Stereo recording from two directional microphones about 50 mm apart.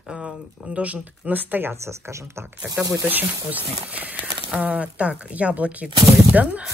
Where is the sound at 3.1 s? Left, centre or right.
Right.